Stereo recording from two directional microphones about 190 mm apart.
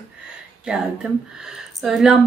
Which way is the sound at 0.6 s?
5° right (ahead or behind).